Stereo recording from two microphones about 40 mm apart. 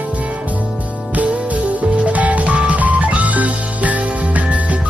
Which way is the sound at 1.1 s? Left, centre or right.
Right.